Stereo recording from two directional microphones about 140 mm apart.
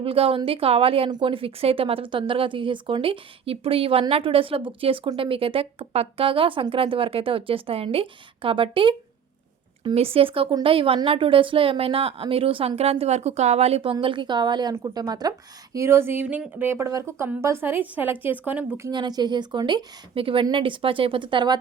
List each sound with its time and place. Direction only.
0.0 s a woman's voice: 40° right (ahead or behind)
13.9 s a woman's voice: 35° right (ahead or behind); by 18.9 s 15° right (ahead or behind)
18.9 s a woman's voice: 30° right (ahead or behind)